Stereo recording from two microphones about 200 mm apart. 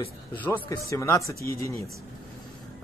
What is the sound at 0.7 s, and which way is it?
Speech, 15° left (ahead or behind).